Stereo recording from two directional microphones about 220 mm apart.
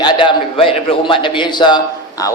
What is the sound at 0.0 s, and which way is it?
A man's voice, 20° left (ahead or behind).